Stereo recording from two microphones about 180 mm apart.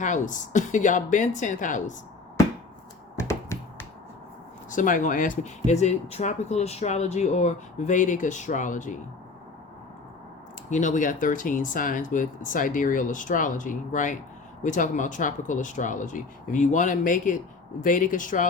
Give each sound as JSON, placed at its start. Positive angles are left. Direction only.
{"t": 0.0, "sound": "speech", "side_deg": 45}
{"t": 3.2, "sound": "hands", "side_deg": 15}
{"t": 4.7, "sound": "speech", "side_deg": 45}
{"t": 10.7, "sound": "speech", "side_deg": 45}